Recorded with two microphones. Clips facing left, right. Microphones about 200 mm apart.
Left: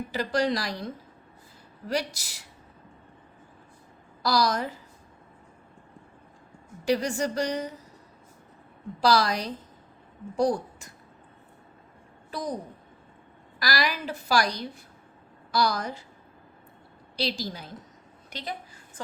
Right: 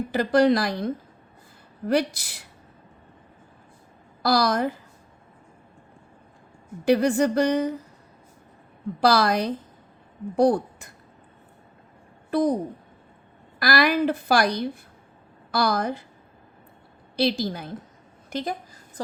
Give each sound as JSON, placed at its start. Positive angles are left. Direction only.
{"t": 0.1, "sound": "a woman's voice", "side_deg": -55}
{"t": 1.9, "sound": "a woman's voice", "side_deg": -55}
{"t": 4.2, "sound": "a woman's voice", "side_deg": -55}
{"t": 6.8, "sound": "a woman's voice", "side_deg": -55}
{"t": 9.0, "sound": "a woman's voice", "side_deg": -55}
{"t": 12.3, "sound": "a woman's voice", "side_deg": -60}
{"t": 13.6, "sound": "a woman's voice", "side_deg": -55}
{"t": 17.2, "sound": "a woman's voice", "side_deg": -55}